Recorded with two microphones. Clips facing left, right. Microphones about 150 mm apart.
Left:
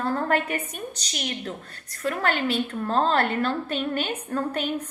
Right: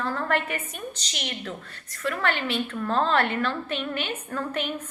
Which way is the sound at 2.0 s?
40° left (ahead or behind).